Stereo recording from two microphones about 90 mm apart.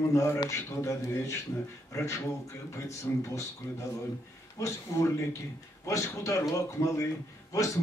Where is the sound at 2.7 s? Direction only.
35° left (ahead or behind).